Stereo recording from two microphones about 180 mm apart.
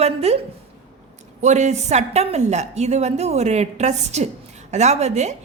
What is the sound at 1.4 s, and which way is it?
A woman's voice, 40° right (ahead or behind).